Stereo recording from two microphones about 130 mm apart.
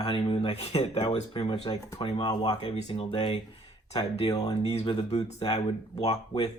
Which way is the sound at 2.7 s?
45° left (ahead or behind).